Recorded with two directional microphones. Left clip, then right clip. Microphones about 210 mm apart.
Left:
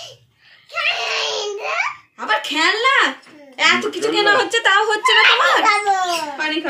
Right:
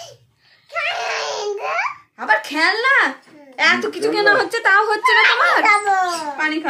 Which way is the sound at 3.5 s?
15° right (ahead or behind).